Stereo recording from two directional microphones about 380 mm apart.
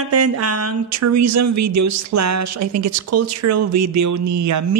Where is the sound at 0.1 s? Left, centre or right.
Right.